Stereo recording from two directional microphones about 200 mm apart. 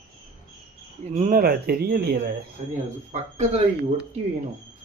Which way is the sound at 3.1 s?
35° right (ahead or behind).